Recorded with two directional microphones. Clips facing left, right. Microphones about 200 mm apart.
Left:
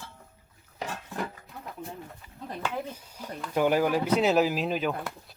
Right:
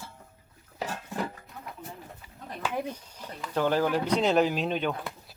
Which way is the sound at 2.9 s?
10° left (ahead or behind).